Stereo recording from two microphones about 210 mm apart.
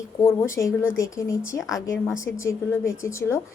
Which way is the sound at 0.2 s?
15° left (ahead or behind).